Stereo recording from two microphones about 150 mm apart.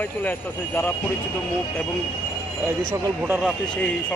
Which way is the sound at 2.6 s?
15° right (ahead or behind).